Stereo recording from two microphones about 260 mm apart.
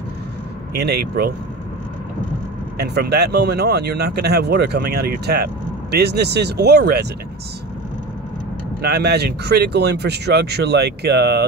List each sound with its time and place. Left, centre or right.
0.7 s speech: right
2.8 s speech: right
8.8 s speech: right